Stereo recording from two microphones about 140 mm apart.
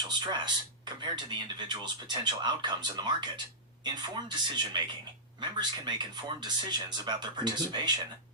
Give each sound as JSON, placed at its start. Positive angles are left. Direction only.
{"t": 0.1, "sound": "speech", "side_deg": -30}